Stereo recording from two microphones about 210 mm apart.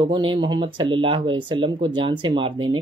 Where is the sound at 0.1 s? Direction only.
20° right (ahead or behind).